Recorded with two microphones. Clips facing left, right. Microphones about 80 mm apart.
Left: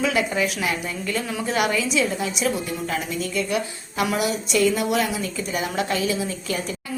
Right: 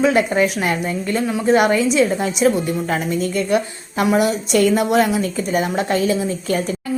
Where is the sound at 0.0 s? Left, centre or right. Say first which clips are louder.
Right 7 dB; right.